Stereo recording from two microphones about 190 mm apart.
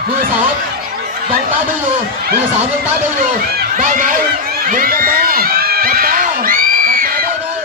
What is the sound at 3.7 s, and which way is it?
Speech, 45° right (ahead or behind).